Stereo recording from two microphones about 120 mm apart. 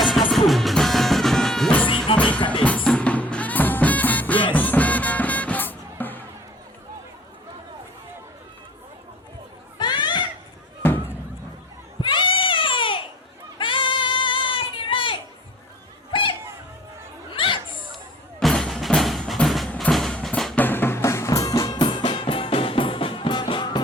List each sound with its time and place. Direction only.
0.3 s music: centre (ahead or behind)
9.7 s chatter: 40° left (ahead or behind)
10.8 s fireworks: 20° left (ahead or behind)
12.0 s a sound: 45° left (ahead or behind)
13.6 s child singing: 45° left (ahead or behind)
17.3 s chatter: 45° left (ahead or behind)
17.9 s music: centre (ahead or behind)
20.6 s music: 15° left (ahead or behind); by 23.8 s 40° left (ahead or behind)